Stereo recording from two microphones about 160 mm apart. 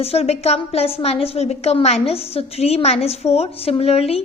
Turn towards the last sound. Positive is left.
turn(degrees=40)  # may be behind; listen again after turning